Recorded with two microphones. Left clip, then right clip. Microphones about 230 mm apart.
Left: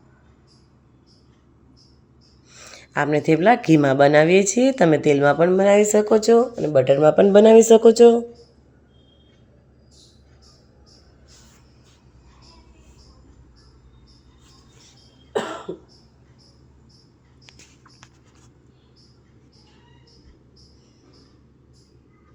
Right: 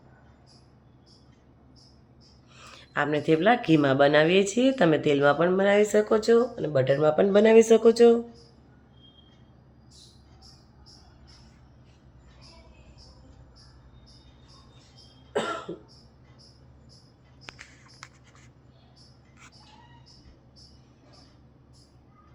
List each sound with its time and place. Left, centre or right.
2.5 s speech: left